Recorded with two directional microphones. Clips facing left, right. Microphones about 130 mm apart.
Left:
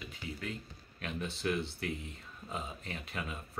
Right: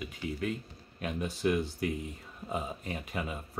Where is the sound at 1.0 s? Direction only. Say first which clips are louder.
Right 4 dB; 10° right (ahead or behind).